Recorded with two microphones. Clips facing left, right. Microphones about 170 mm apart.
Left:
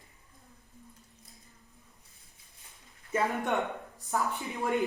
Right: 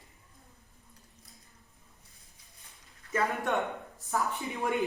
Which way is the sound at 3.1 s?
20° left (ahead or behind).